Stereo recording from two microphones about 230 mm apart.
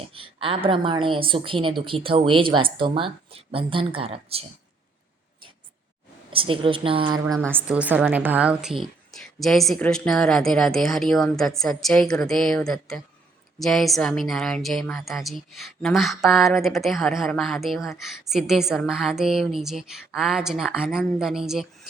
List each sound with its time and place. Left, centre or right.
0.1 s a woman's voice: right
6.3 s a woman's voice: right
7.3 s a woman's voice: centre